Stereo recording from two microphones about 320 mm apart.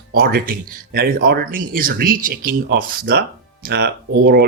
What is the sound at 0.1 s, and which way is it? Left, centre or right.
Speech, right.